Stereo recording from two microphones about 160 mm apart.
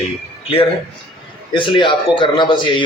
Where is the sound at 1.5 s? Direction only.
30° left (ahead or behind).